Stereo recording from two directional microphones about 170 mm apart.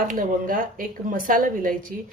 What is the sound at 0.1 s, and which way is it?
Speech, 55° right (ahead or behind).